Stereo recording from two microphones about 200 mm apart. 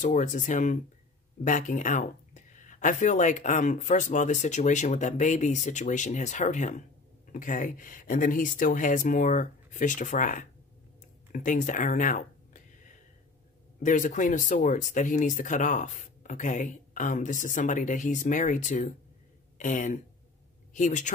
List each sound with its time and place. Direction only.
0.0 s speech: 40° left (ahead or behind)
11.3 s a sound: 40° left (ahead or behind)
13.8 s speech: 40° left (ahead or behind)